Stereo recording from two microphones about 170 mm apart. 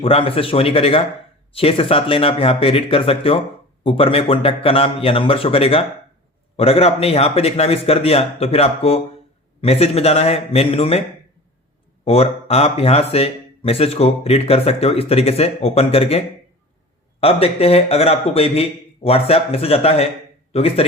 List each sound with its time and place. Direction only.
0.0 s speech: 35° left (ahead or behind)
12.0 s speech: 35° left (ahead or behind)